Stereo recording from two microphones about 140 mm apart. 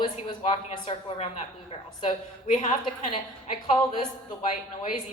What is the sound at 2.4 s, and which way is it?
Speech, 60° left (ahead or behind).